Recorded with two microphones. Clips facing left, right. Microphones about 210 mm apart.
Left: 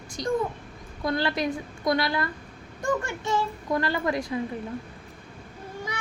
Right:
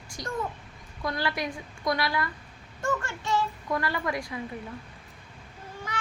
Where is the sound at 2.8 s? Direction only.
15° left (ahead or behind).